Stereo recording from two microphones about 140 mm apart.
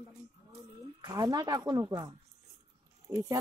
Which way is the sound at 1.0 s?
25° right (ahead or behind).